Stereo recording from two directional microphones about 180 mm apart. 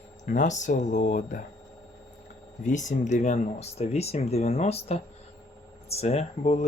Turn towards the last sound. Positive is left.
turn(degrees=35)  # may be behind; listen again after turning